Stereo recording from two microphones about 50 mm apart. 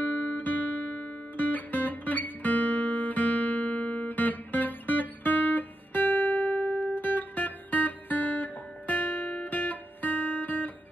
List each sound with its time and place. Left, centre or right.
0.0 s guitar: left